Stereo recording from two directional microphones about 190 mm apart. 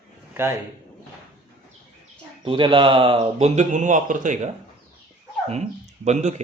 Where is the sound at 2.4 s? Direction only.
25° right (ahead or behind); by 4.4 s 40° right (ahead or behind).